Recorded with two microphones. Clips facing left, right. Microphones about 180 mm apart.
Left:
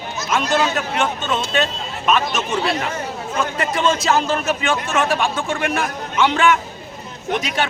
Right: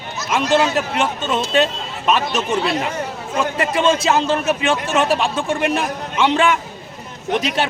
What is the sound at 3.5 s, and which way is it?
A man's voice, 25° right (ahead or behind).